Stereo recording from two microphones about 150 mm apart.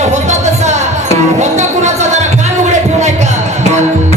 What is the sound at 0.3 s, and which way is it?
Music, 50° right (ahead or behind).